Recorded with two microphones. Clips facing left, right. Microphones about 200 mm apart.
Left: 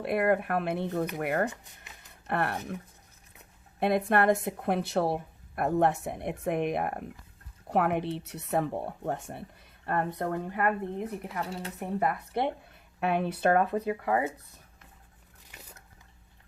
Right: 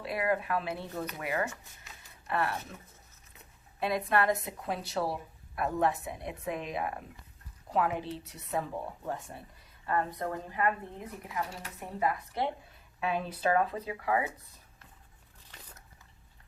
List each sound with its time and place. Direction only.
0.0 s a woman's voice: 55° left (ahead or behind)
3.8 s a woman's voice: 55° left (ahead or behind); by 9.4 s 70° left (ahead or behind)
9.8 s a woman's voice: 60° left (ahead or behind)
13.9 s speech: 45° left (ahead or behind)
15.5 s biting: 10° left (ahead or behind)